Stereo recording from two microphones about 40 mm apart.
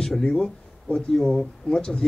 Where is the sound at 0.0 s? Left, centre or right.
Centre.